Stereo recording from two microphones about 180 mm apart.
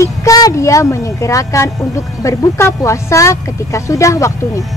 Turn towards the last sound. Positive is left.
turn(degrees=15)  # may be behind; listen again after turning